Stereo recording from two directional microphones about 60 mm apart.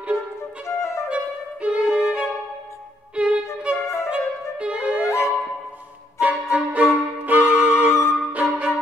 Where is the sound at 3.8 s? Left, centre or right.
Left.